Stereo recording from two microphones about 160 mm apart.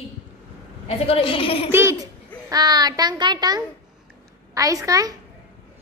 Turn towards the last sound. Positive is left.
turn(degrees=-20)  # may be behind; listen again after turning